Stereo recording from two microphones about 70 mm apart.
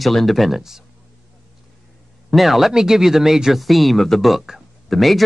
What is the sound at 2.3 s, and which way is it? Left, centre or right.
Speech, centre.